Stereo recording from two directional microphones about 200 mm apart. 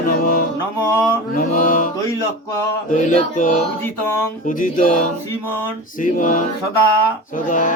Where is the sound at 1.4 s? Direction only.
45° left (ahead or behind).